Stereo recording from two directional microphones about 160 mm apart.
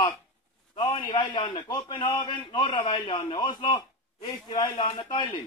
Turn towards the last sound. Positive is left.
turn(degrees=25)  # may be behind; listen again after turning